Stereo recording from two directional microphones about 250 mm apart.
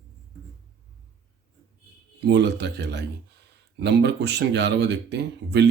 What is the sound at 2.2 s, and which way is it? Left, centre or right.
Speech, right.